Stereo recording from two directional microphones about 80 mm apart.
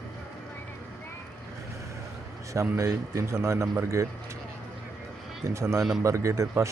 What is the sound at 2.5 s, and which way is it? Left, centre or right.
A man's voice, right.